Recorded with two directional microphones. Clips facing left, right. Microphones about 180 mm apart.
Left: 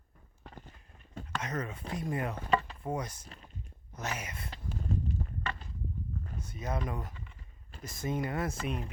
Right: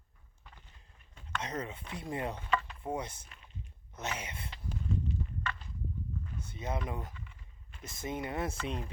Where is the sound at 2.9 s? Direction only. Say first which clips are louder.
Left 1 dB; 25° right (ahead or behind).